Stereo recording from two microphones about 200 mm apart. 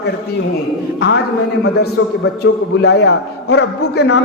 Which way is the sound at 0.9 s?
65° left (ahead or behind).